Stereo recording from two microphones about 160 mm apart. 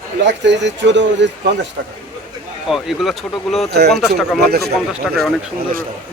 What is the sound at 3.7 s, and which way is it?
Speech, 90° right.